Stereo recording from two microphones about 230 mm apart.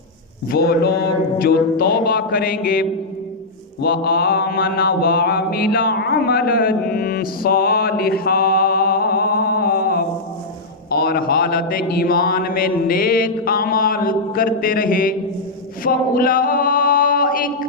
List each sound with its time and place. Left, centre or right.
0.5 s speech: left
3.8 s mantra: left
10.9 s speech: left
15.8 s chant: left